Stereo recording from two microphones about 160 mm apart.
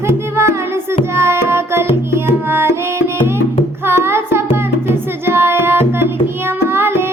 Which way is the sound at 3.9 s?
15° right (ahead or behind).